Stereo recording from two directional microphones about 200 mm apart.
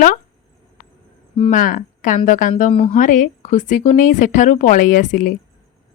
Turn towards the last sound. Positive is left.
turn(degrees=40)  # may be behind; listen again after turning